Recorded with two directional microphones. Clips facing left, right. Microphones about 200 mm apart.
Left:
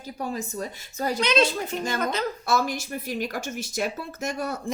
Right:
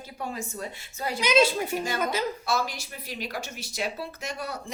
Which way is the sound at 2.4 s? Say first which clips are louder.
Left 4 dB; 50° left (ahead or behind).